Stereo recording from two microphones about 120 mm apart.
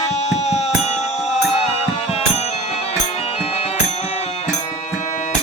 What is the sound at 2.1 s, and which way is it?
Music, 60° left (ahead or behind).